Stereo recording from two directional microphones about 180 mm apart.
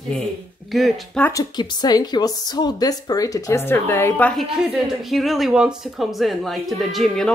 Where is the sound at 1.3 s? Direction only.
20° left (ahead or behind).